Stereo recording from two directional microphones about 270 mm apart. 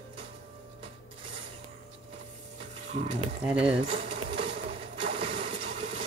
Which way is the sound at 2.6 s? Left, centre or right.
Right.